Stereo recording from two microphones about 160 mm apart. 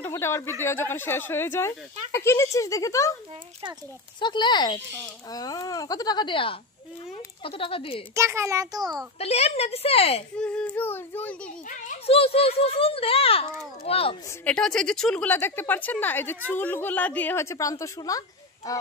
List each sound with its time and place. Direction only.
0.0 s a woman's voice: 15° left (ahead or behind)
4.2 s a child's voice: 30° left (ahead or behind)
8.1 s a child's voice: 15° right (ahead or behind)
9.2 s a child's voice: 40° left (ahead or behind)
10.3 s a woman's voice: 5° left (ahead or behind)
12.1 s a child's voice: 35° left (ahead or behind)
14.4 s a woman's voice: 5° left (ahead or behind); by 18.2 s 20° left (ahead or behind)